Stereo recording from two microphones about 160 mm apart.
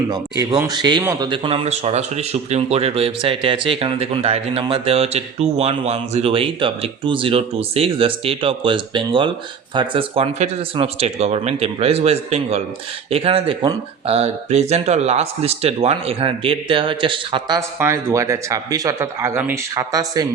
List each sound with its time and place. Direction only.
0.1 s a man's voice: 25° right (ahead or behind)
14.1 s a man's voice: 40° right (ahead or behind)
17.6 s speech: 15° right (ahead or behind)